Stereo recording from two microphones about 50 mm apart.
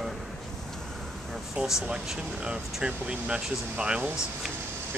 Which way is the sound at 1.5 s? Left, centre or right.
Centre.